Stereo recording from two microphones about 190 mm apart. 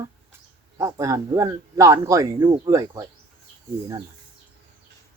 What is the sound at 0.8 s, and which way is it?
Speech, 15° right (ahead or behind).